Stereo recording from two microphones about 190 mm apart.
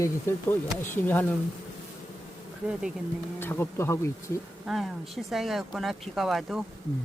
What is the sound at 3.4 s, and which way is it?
Speech, 10° left (ahead or behind).